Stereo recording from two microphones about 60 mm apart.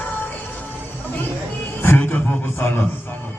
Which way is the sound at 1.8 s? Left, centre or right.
Left.